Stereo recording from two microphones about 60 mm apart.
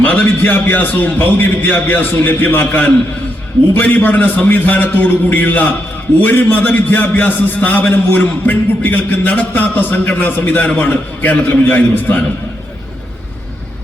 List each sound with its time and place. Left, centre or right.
0.0 s a man's voice: left